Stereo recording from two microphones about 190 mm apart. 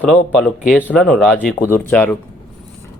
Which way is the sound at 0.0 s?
5° left (ahead or behind).